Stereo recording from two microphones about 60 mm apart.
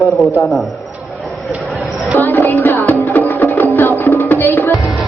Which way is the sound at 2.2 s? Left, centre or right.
Left.